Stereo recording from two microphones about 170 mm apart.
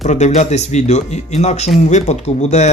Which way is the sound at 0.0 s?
45° left (ahead or behind).